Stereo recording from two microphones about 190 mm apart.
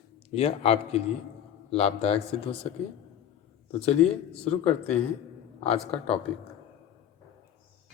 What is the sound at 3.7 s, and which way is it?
Speech, 30° left (ahead or behind).